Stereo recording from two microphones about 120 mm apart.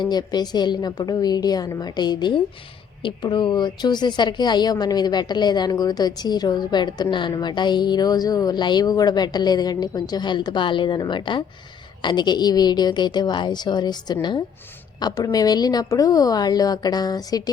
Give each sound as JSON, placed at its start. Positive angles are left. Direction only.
{"t": 0.0, "sound": "a woman's voice", "side_deg": 35}